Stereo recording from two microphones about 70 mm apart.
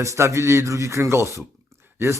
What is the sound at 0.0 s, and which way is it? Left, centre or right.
A man's voice, right.